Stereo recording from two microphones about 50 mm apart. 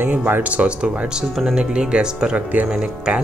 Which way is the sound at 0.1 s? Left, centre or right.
Right.